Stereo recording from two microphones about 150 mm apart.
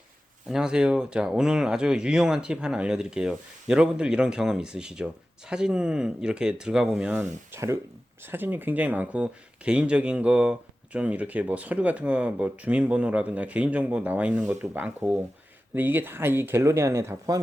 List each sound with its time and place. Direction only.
0.4 s speech: 5° right (ahead or behind)
7.2 s speech: 20° right (ahead or behind)